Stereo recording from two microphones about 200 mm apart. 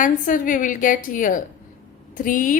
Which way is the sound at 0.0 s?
40° left (ahead or behind).